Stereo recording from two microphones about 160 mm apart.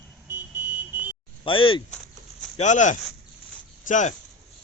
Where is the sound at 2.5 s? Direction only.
50° left (ahead or behind).